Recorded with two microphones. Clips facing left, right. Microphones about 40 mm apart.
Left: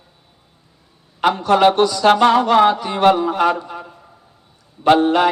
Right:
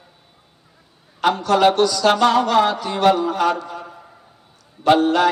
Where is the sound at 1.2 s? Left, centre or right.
Left.